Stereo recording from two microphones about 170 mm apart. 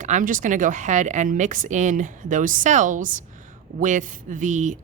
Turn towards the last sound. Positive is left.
turn(degrees=-45)  # may be behind; listen again after turning